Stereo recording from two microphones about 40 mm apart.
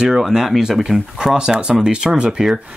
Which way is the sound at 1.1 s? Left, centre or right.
Centre.